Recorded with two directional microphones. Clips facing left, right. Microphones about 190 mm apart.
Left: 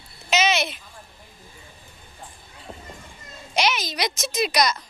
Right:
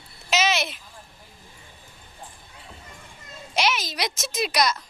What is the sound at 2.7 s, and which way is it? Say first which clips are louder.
Children playing: left 8 dB; 40° left (ahead or behind).